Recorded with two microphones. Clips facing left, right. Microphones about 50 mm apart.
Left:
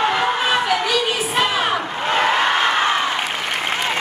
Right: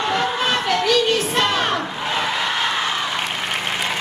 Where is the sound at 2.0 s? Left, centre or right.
Left.